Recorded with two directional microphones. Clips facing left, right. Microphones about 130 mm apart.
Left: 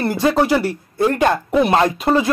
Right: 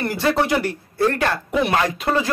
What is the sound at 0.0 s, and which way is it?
A man's voice, 20° left (ahead or behind).